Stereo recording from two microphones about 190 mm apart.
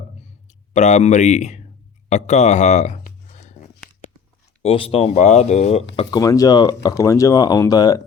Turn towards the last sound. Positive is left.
turn(degrees=20)  # may be behind; listen again after turning